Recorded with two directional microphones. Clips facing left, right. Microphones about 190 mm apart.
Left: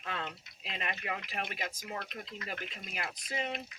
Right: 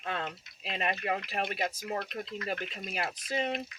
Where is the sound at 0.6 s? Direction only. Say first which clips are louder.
Right 7 dB; 40° right (ahead or behind).